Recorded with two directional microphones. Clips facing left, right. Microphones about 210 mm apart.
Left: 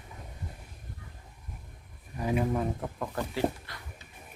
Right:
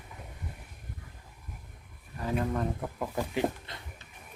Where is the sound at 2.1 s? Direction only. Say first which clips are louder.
Left 2 dB; 10° left (ahead or behind).